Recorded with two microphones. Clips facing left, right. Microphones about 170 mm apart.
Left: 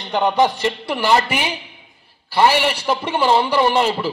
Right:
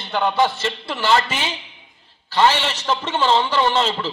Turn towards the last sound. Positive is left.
turn(degrees=10)  # may be behind; listen again after turning